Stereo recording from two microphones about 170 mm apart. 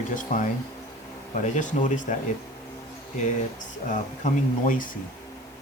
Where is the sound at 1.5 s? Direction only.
45° left (ahead or behind).